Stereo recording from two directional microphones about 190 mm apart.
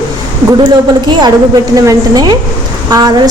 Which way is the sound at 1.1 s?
25° right (ahead or behind).